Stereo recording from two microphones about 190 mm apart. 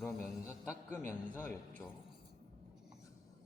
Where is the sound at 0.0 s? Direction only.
Centre (ahead or behind).